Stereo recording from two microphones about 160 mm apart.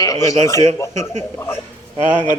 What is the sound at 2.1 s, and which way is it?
Speech, 30° left (ahead or behind).